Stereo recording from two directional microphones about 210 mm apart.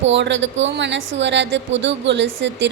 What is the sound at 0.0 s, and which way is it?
A woman's voice, 60° right (ahead or behind).